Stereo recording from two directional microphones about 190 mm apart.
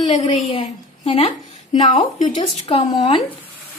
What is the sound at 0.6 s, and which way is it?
Speech, 30° left (ahead or behind).